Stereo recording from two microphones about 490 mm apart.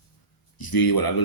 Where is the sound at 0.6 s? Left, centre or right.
Left.